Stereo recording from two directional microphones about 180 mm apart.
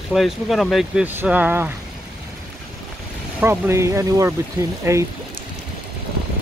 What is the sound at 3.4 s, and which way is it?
Speech, 10° right (ahead or behind).